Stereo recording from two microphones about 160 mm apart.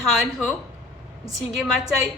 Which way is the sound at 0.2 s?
Centre (ahead or behind).